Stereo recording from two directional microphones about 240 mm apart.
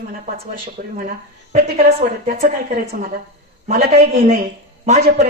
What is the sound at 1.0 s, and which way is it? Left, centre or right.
A woman's voice, right.